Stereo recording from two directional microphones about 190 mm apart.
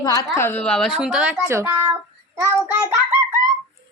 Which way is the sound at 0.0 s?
15° left (ahead or behind).